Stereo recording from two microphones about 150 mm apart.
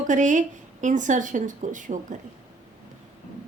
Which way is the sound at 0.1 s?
55° right (ahead or behind).